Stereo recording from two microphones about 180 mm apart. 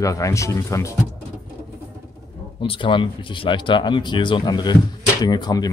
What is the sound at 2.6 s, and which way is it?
Speech, 25° left (ahead or behind).